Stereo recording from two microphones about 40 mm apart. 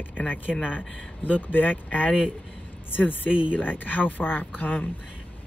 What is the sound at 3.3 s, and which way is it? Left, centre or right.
Speech, right.